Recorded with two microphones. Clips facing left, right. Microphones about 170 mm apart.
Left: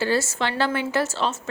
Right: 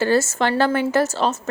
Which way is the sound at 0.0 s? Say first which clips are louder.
Right 5 dB; 45° right (ahead or behind).